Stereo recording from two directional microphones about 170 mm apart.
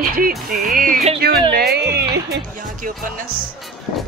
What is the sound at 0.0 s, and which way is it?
Music, 60° right (ahead or behind).